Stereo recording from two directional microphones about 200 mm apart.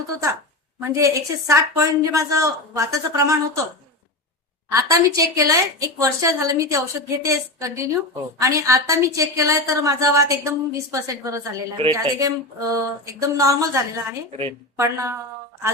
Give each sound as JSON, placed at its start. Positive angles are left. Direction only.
{"t": 0.8, "sound": "a woman's voice", "side_deg": -15}
{"t": 4.7, "sound": "a woman's voice", "side_deg": -15}